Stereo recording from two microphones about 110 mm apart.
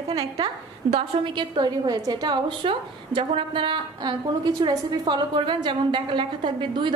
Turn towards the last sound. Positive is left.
turn(degrees=-45)  # may be behind; listen again after turning